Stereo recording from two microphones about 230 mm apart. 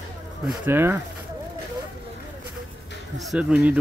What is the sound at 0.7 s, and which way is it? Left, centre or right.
Speech, centre.